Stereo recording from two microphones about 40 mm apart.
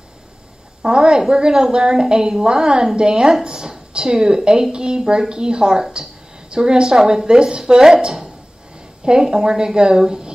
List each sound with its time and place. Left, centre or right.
0.8 s a woman's voice: right
8.7 s a sound: right
9.2 s speech: centre